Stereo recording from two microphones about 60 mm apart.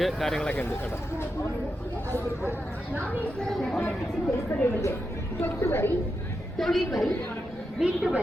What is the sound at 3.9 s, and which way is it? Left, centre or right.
Speech, centre.